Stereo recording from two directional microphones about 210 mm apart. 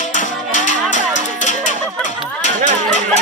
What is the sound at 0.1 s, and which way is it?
Music, 35° left (ahead or behind).